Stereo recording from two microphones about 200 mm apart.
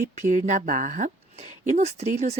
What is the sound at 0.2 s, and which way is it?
Speech, 35° right (ahead or behind).